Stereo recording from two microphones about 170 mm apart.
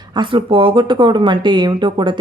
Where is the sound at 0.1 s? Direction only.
30° right (ahead or behind).